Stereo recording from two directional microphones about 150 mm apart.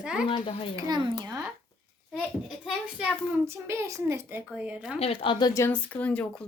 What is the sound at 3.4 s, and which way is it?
Speech, 15° right (ahead or behind).